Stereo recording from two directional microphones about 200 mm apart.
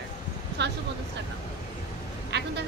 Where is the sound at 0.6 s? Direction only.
60° right (ahead or behind).